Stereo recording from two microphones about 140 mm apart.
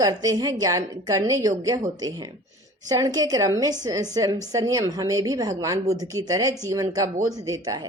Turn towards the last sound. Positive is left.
turn(degrees=-25)  # may be behind; listen again after turning